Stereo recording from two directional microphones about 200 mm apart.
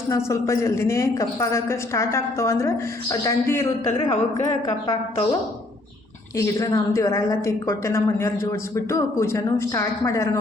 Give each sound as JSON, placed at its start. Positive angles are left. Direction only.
{"t": 0.1, "sound": "a woman's voice", "side_deg": 15}
{"t": 6.3, "sound": "a woman's voice", "side_deg": 15}